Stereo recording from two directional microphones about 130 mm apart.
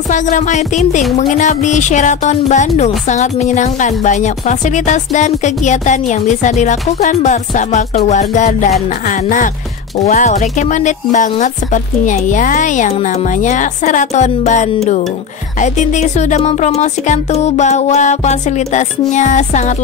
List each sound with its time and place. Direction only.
0.1 s a woman's voice: 70° left (ahead or behind)
9.0 s speech: 80° left
9.9 s a woman's voice: 65° left (ahead or behind)